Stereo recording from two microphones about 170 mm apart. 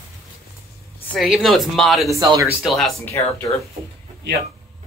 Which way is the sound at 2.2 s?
20° right (ahead or behind).